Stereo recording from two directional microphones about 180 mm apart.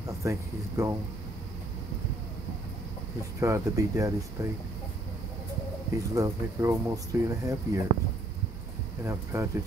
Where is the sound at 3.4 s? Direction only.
20° right (ahead or behind).